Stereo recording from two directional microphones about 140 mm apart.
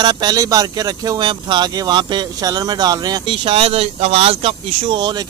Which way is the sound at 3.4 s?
40° right (ahead or behind).